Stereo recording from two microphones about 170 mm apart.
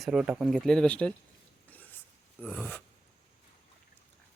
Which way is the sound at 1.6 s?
10° left (ahead or behind).